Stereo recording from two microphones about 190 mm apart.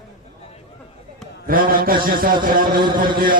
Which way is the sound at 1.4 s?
50° right (ahead or behind).